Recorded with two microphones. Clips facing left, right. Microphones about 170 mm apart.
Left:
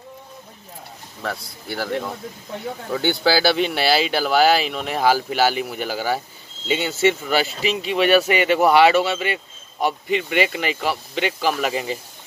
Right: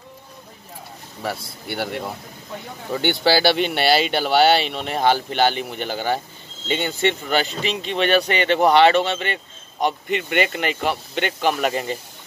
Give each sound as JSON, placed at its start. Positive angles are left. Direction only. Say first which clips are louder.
{"t": 1.2, "sound": "speech", "louder": "right 1 dB", "side_deg": 0}